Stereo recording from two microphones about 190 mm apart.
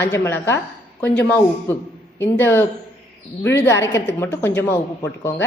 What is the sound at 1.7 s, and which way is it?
Speech, 10° left (ahead or behind).